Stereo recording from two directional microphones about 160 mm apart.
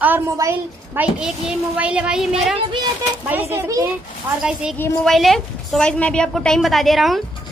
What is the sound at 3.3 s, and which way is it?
Speech, 15° right (ahead or behind).